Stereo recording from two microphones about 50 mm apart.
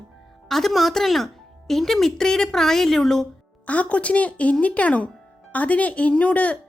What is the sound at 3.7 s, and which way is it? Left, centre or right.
Speech, left.